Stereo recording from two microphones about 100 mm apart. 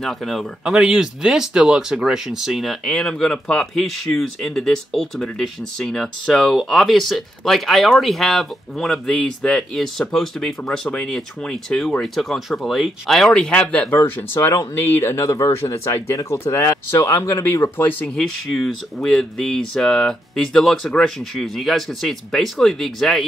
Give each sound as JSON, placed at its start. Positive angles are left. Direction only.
{"t": 0.0, "sound": "speech", "side_deg": 0}
{"t": 18.0, "sound": "speech", "side_deg": 0}